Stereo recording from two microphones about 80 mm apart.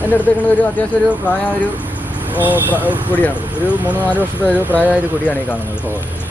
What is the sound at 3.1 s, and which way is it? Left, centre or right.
Speech, left.